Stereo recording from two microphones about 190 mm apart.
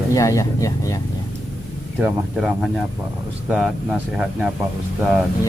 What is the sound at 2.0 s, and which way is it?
Speech, 5° right (ahead or behind).